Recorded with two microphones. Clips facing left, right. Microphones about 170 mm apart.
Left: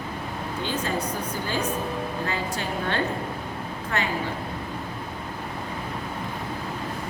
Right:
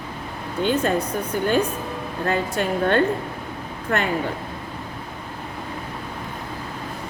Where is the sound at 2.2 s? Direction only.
55° right (ahead or behind).